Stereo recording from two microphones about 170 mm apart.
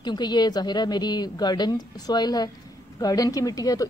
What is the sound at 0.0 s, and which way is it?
Speech, 25° left (ahead or behind).